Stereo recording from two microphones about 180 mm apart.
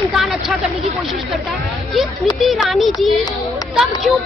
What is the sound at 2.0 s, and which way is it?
A woman's voice, centre (ahead or behind).